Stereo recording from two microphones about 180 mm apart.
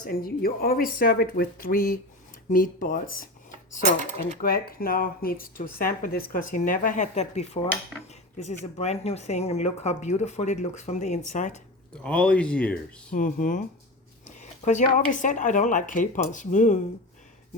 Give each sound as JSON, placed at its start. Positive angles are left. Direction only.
{"t": 0.0, "sound": "speech", "side_deg": 55}
{"t": 4.4, "sound": "speech", "side_deg": 55}
{"t": 8.1, "sound": "dishes", "side_deg": 40}
{"t": 8.6, "sound": "speech", "side_deg": 35}
{"t": 12.0, "sound": "speech", "side_deg": 5}
{"t": 13.1, "sound": "speech", "side_deg": 45}
{"t": 14.3, "sound": "a sound", "side_deg": 40}
{"t": 14.9, "sound": "speech", "side_deg": 45}